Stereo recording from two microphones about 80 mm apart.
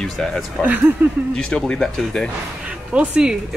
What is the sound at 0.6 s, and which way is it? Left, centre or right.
Speech, centre.